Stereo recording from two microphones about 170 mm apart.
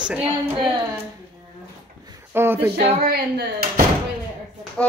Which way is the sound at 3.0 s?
60° right (ahead or behind).